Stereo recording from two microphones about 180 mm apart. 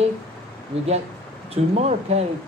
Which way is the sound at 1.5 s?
35° right (ahead or behind).